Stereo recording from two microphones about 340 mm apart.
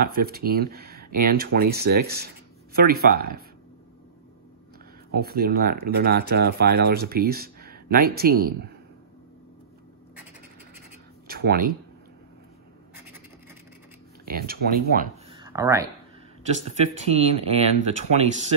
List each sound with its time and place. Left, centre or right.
0.0 s speech: right
5.1 s speech: right
11.2 s a sound: right
14.2 s speech: right
15.3 s a sound: centre
16.4 s speech: centre